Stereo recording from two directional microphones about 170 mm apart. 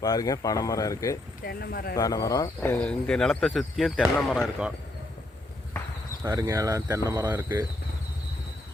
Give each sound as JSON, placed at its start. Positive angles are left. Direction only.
{"t": 0.0, "sound": "speech", "side_deg": 20}
{"t": 1.5, "sound": "speech", "side_deg": 65}
{"t": 2.0, "sound": "speech", "side_deg": 20}
{"t": 6.2, "sound": "speech", "side_deg": -20}